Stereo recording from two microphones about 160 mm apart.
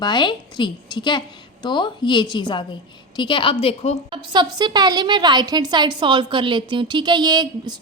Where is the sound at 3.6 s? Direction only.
45° left (ahead or behind).